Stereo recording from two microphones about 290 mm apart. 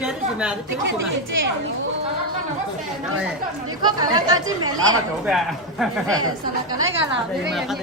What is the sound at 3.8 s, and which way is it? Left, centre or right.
Speech, centre.